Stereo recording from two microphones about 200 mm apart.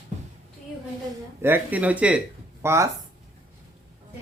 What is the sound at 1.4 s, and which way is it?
Speech, 10° right (ahead or behind).